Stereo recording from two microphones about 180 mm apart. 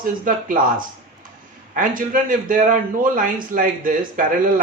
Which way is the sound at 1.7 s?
50° right (ahead or behind).